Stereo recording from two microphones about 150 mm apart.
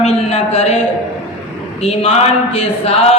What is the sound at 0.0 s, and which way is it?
Speech, 45° left (ahead or behind).